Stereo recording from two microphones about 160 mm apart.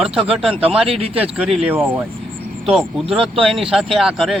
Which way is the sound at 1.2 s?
5° right (ahead or behind).